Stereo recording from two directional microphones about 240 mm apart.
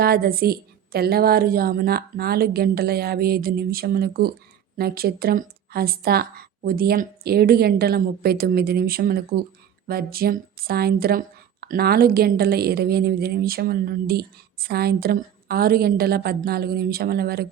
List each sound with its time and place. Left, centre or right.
0.0 s speech: right